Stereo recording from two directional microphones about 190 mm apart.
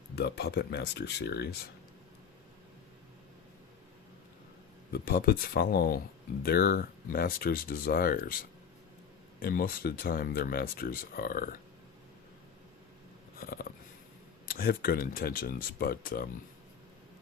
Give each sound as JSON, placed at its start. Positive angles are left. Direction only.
{"t": 0.2, "sound": "speech", "side_deg": 60}
{"t": 4.9, "sound": "speech", "side_deg": 50}
{"t": 13.4, "sound": "mechanisms", "side_deg": 50}
{"t": 14.4, "sound": "speech", "side_deg": 50}